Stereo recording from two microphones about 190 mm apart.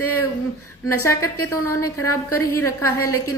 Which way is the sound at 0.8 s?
15° left (ahead or behind).